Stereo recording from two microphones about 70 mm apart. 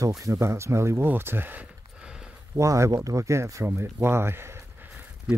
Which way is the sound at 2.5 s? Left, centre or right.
Right.